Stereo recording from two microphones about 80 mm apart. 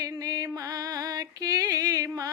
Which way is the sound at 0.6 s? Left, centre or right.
Right.